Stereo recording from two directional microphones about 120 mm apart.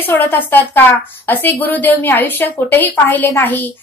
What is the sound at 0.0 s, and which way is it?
A woman's voice, 15° left (ahead or behind).